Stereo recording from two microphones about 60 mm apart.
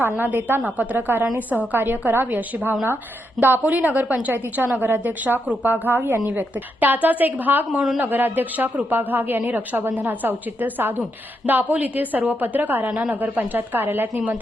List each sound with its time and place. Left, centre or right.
0.0 s a woman's voice: right
7.7 s a man's voice: centre
7.9 s a woman's voice: right
12.9 s a man's voice: centre
13.1 s a woman's voice: right